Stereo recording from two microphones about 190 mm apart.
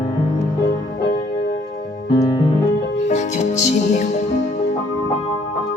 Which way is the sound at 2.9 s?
40° left (ahead or behind).